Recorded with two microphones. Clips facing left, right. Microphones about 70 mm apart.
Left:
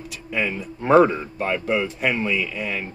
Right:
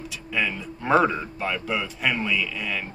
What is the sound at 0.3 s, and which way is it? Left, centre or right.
Speech, left.